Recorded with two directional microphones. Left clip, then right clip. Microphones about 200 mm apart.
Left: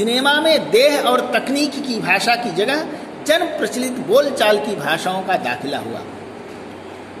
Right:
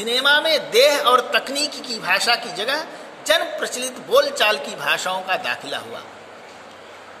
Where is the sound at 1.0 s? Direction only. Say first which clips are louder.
Even; 50° right (ahead or behind).